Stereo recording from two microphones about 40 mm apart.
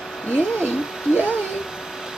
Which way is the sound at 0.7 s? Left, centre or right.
Centre.